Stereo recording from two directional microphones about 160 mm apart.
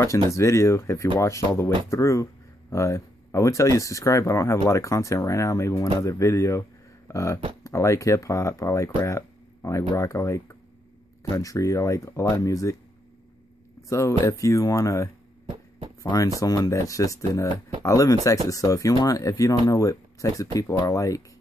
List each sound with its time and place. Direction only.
0.3 s speech: 15° left (ahead or behind)
7.1 s beatboxing: 15° left (ahead or behind)
7.6 s speech: 20° left (ahead or behind)
13.8 s speech: 20° left (ahead or behind)